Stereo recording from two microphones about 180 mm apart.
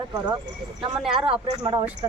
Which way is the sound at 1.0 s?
5° right (ahead or behind).